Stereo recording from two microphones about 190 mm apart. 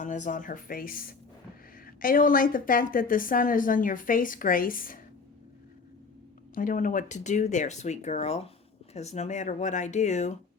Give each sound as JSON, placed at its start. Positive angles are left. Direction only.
{"t": 0.0, "sound": "a woman's voice", "side_deg": 40}
{"t": 6.5, "sound": "speech", "side_deg": 45}